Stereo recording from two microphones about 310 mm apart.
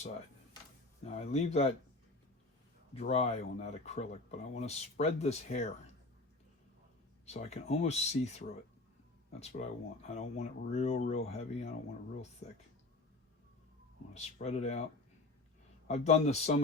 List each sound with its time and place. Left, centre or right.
1.0 s speech: left
2.9 s speech: centre
7.3 s speech: left
14.1 s speech: left
15.9 s speech: left